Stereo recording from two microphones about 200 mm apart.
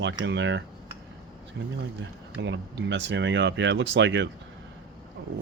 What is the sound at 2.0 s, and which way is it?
Speech, 65° right (ahead or behind).